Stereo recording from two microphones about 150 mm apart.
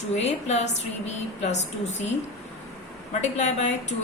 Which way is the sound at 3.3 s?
50° left (ahead or behind).